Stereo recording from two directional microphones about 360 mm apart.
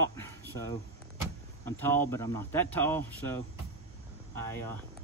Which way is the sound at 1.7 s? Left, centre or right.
Centre.